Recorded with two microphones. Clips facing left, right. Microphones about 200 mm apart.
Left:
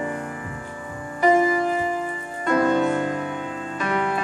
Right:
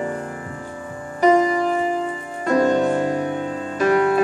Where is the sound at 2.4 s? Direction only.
40° right (ahead or behind).